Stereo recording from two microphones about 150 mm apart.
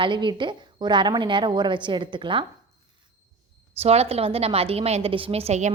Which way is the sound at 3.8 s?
40° right (ahead or behind).